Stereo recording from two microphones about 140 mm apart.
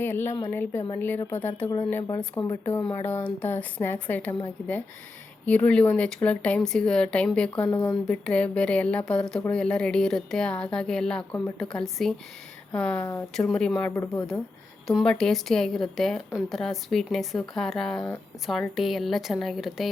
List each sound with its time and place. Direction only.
0.0 s speech: 15° left (ahead or behind)
5.5 s a woman's voice: 10° left (ahead or behind)
14.8 s a woman's voice: 5° left (ahead or behind)